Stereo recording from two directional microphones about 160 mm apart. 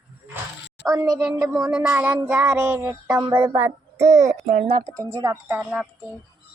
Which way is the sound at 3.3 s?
30° right (ahead or behind).